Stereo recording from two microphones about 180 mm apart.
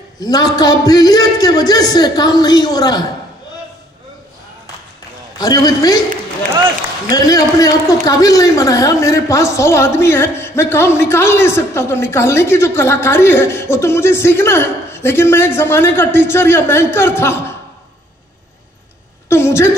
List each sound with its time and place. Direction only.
0.2 s a man's voice: 20° left (ahead or behind)
5.4 s a man's voice: 20° left (ahead or behind)
7.1 s a man's voice: 20° left (ahead or behind)
19.2 s a sound: 15° left (ahead or behind)